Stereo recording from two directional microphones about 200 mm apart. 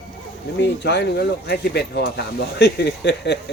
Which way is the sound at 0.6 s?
60° left (ahead or behind).